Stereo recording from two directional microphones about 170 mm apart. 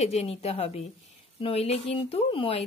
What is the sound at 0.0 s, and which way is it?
Speech, 35° left (ahead or behind).